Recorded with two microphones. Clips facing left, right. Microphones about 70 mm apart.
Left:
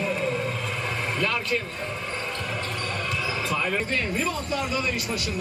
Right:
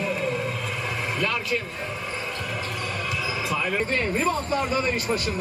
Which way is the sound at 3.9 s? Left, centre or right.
Right.